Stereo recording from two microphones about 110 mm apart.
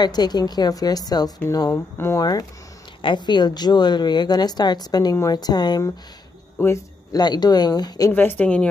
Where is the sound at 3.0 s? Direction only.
45° left (ahead or behind).